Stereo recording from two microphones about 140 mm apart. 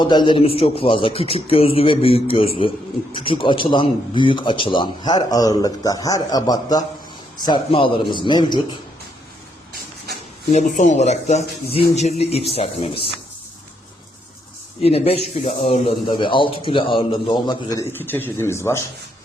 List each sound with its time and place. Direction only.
0.0 s a man's voice: 35° left (ahead or behind)
10.5 s speech: 60° left (ahead or behind); by 13.1 s 45° left (ahead or behind)
14.8 s a man's voice: 45° left (ahead or behind); by 18.8 s 20° left (ahead or behind)